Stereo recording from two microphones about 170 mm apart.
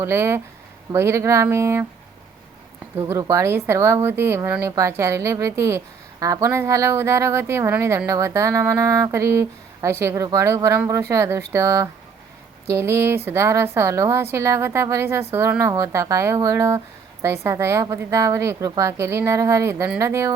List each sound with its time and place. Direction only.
0.0 s a woman's voice: 15° right (ahead or behind)
3.0 s a woman's voice: 20° right (ahead or behind)